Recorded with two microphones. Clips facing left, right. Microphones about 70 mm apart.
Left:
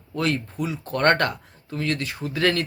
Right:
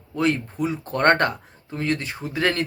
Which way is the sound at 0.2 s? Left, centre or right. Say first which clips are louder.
Right 3 dB; right.